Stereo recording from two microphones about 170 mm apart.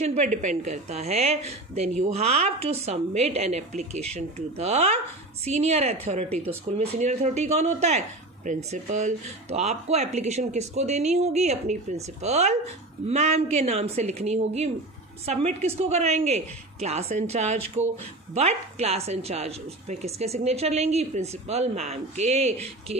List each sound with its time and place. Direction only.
0.0 s speech: 40° right (ahead or behind)